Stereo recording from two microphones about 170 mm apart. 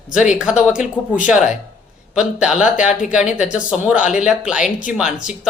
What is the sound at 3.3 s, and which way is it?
A man's voice, 5° right (ahead or behind).